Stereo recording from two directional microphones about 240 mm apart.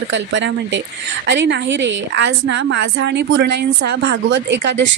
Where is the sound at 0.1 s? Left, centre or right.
Right.